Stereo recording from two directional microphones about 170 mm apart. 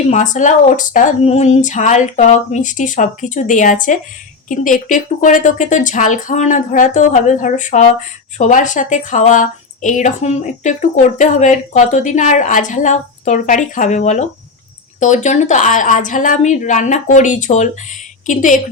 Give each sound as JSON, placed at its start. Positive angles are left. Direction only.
{"t": 0.1, "sound": "speech", "side_deg": 45}